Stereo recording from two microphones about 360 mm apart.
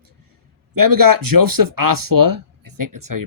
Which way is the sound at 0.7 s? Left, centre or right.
Right.